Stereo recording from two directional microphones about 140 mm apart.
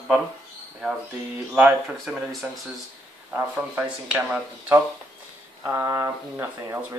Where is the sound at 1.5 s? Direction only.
10° right (ahead or behind).